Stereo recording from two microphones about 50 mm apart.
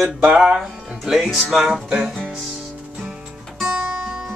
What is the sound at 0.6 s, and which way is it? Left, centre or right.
Speech, centre.